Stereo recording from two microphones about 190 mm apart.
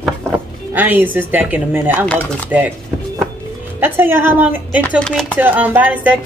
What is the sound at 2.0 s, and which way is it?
Speech, 5° left (ahead or behind).